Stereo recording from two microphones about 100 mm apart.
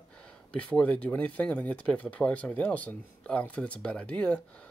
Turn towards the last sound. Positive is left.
turn(degrees=10)  # may be behind; listen again after turning